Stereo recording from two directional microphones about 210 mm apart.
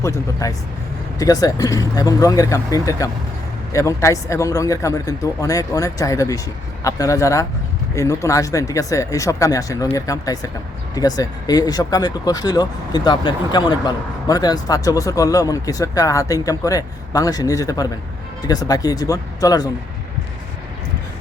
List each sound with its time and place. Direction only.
0.0 s speech: 15° left (ahead or behind)